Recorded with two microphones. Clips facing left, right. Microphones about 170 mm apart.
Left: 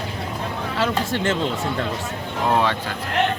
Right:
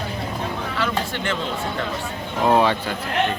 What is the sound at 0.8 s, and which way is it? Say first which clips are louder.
Speech: left 4 dB; 40° left (ahead or behind).